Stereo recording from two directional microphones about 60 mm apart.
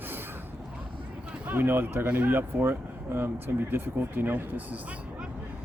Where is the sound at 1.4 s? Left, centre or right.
Right.